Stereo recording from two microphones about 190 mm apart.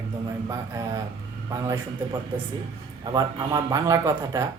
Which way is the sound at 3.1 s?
20° right (ahead or behind).